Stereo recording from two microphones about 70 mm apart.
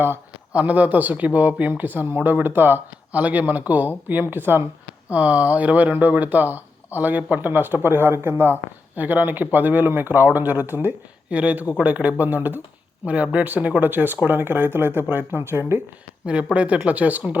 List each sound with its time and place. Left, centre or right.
0.5 s speech: right
16.2 s speech: centre